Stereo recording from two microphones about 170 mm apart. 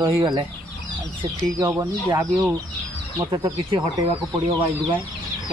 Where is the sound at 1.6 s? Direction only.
20° right (ahead or behind).